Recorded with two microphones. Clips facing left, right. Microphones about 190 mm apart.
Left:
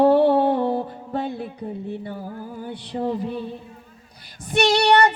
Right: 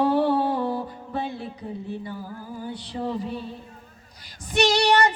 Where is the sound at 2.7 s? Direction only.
55° left (ahead or behind).